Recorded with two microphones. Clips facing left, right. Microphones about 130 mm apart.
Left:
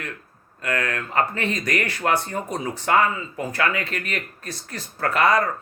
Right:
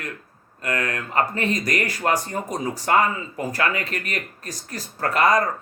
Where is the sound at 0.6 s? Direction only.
35° right (ahead or behind).